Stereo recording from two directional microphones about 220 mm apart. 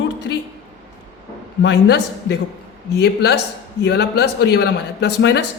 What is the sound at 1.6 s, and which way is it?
A man's voice, 50° left (ahead or behind).